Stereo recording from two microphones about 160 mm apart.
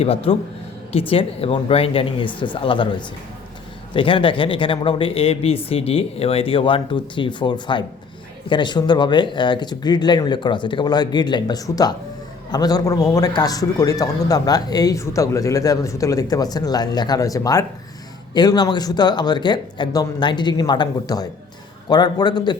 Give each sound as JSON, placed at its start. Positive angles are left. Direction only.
{"t": 0.0, "sound": "speech", "side_deg": 35}
{"t": 3.9, "sound": "a man's voice", "side_deg": 30}